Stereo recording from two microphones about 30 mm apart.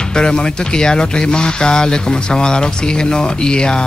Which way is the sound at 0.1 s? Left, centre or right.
Left.